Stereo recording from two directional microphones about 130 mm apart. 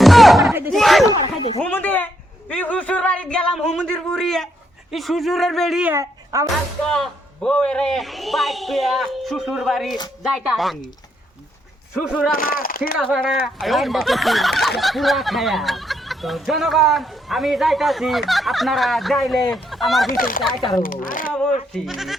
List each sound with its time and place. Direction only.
0.0 s battle cry: centre (ahead or behind)
0.7 s a sound: centre (ahead or behind)
1.4 s speech: 50° left (ahead or behind)
1.6 s speech: 15° left (ahead or behind)
5.8 s speech: 20° right (ahead or behind)
6.8 s speech: 5° left (ahead or behind)
12.3 s speech: 90° left
13.1 s speech: centre (ahead or behind)
20.1 s speech: 90° left
21.3 s speech: 5° left (ahead or behind)